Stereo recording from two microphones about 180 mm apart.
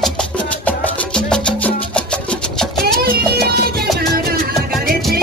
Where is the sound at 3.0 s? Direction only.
60° right (ahead or behind).